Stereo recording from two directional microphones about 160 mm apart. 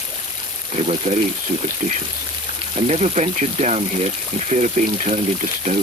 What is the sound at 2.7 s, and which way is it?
Speech, 45° right (ahead or behind).